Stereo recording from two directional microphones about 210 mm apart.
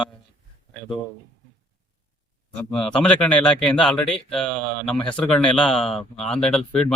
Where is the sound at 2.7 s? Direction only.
5° left (ahead or behind).